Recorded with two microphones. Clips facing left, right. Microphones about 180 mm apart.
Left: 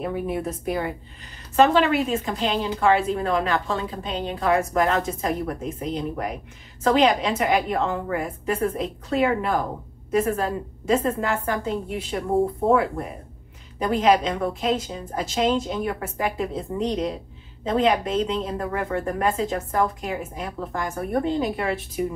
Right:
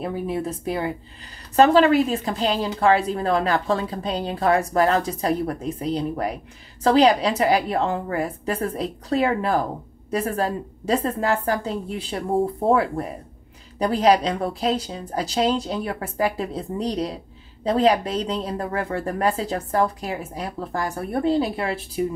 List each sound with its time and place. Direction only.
0.0 s a woman's voice: 30° right (ahead or behind)
13.7 s a woman's voice: 35° right (ahead or behind)